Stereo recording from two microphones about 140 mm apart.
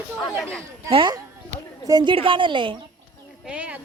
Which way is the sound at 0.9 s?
40° right (ahead or behind).